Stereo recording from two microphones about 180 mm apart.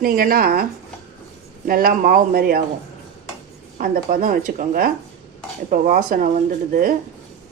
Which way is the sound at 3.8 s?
50° right (ahead or behind).